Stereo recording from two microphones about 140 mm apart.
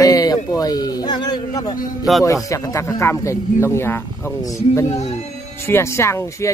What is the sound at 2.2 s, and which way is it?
Speech, 25° left (ahead or behind).